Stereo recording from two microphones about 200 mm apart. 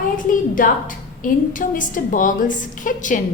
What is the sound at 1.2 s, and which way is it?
A woman's voice, 40° left (ahead or behind).